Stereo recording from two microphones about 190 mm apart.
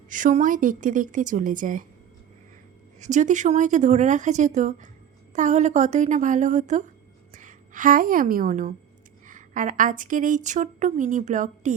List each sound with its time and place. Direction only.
0.1 s a woman's voice: 45° right (ahead or behind)
3.0 s a woman's voice: 40° right (ahead or behind)